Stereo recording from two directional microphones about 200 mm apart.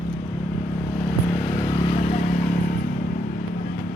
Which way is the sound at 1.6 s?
25° left (ahead or behind).